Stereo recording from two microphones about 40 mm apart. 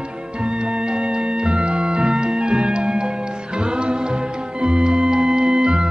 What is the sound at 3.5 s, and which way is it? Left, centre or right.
Music, right.